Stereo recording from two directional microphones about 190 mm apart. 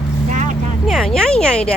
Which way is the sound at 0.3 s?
40° right (ahead or behind).